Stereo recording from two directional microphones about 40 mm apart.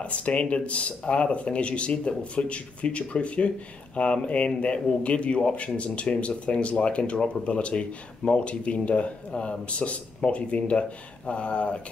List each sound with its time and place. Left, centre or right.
0.0 s speech: left